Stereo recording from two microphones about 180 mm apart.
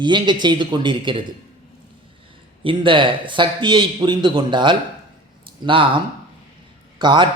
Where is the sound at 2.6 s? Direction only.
30° right (ahead or behind).